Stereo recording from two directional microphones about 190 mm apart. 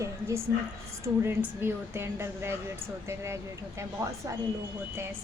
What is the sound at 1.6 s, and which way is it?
A woman's voice, 10° right (ahead or behind).